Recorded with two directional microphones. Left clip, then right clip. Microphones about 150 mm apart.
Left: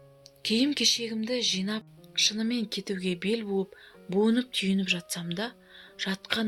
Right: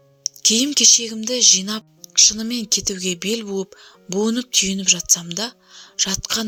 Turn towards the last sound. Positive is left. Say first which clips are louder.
# right 9 dB
turn(degrees=-35)  # may be behind; listen again after turning